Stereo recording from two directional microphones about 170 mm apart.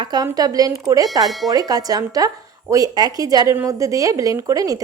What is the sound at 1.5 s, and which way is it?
Speech, 20° right (ahead or behind).